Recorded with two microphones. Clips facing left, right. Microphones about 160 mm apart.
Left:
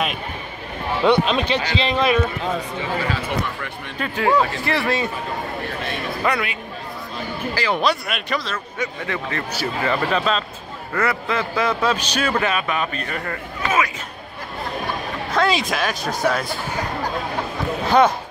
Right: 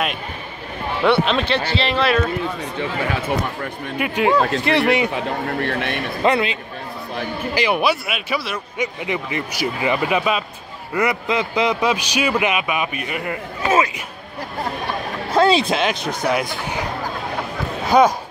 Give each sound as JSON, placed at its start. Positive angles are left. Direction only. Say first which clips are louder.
{"t": 1.0, "sound": "speech", "louder": "even", "side_deg": 15}
{"t": 3.1, "sound": "speech", "louder": "right 2 dB", "side_deg": -55}
{"t": 4.0, "sound": "a man's voice", "louder": "right 1 dB", "side_deg": -15}
{"t": 5.7, "sound": "a man's voice", "louder": "right 5 dB", "side_deg": -70}
{"t": 6.2, "sound": "a man's voice", "louder": "right 6 dB", "side_deg": -25}
{"t": 7.8, "sound": "speech", "louder": "right 1 dB", "side_deg": -5}
{"t": 8.7, "sound": "a man's voice", "louder": "right 3 dB", "side_deg": -15}
{"t": 15.3, "sound": "speech", "louder": "right 5 dB", "side_deg": -30}
{"t": 17.8, "sound": "speech", "louder": "right 2 dB", "side_deg": -10}